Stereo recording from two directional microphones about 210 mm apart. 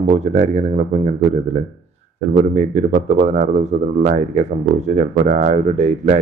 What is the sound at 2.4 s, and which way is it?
Speech, 35° right (ahead or behind).